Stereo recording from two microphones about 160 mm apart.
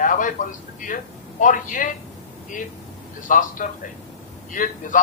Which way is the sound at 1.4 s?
55° left (ahead or behind).